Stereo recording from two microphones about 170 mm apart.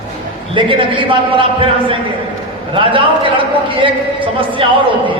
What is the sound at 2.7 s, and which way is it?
A man's voice, 30° right (ahead or behind).